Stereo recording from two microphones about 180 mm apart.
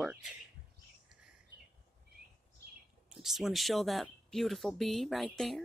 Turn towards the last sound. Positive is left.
turn(degrees=0)  # may be behind; listen again after turning